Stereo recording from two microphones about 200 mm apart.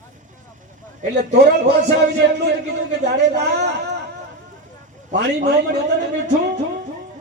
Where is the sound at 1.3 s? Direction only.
55° right (ahead or behind).